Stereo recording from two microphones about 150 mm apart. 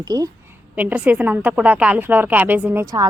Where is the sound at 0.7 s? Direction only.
10° right (ahead or behind).